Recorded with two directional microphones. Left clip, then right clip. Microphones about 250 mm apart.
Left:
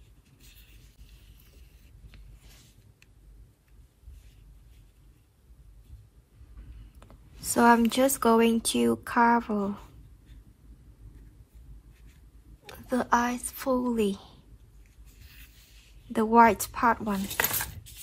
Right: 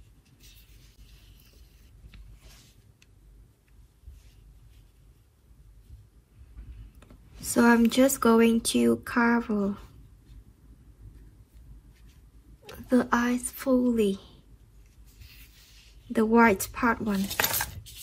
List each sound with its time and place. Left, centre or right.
7.5 s speech: centre
12.7 s speech: centre
16.1 s speech: centre